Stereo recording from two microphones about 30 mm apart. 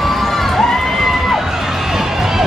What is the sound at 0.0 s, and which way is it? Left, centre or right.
Crowd, centre.